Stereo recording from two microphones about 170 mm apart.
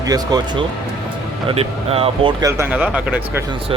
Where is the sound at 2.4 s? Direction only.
10° right (ahead or behind).